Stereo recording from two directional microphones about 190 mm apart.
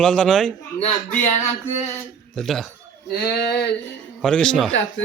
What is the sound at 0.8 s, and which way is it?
Speech, 35° left (ahead or behind).